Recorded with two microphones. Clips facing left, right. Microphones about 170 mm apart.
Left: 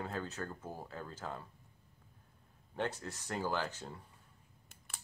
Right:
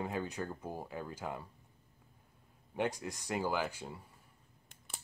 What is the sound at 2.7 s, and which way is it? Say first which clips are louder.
Speech: right 3 dB; 15° right (ahead or behind).